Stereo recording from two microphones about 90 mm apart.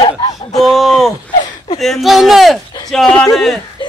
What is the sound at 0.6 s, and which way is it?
A man's voice, centre (ahead or behind).